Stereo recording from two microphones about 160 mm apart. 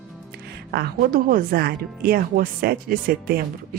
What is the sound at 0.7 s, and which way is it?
A woman's voice, 90° right.